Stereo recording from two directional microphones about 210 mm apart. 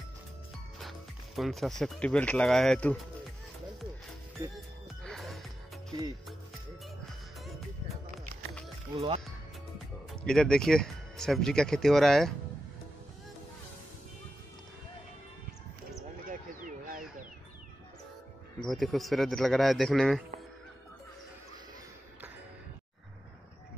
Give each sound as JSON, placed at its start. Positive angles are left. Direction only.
{"t": 0.7, "sound": "speech", "side_deg": 0}
{"t": 4.6, "sound": "music", "side_deg": 0}
{"t": 8.9, "sound": "speech", "side_deg": -30}
{"t": 10.2, "sound": "speech", "side_deg": 5}
{"t": 16.3, "sound": "a sound", "side_deg": -40}
{"t": 18.6, "sound": "speech", "side_deg": 0}